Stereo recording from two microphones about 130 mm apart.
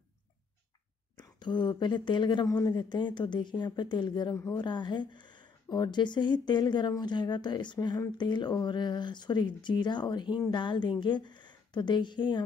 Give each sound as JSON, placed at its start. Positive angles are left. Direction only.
{"t": 1.1, "sound": "a woman's voice", "side_deg": 35}